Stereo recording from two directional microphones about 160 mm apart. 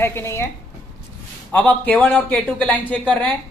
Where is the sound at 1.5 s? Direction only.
10° left (ahead or behind).